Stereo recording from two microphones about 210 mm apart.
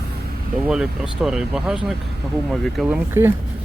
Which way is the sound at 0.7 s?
5° right (ahead or behind).